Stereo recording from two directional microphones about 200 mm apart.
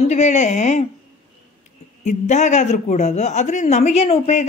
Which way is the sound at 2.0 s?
35° left (ahead or behind).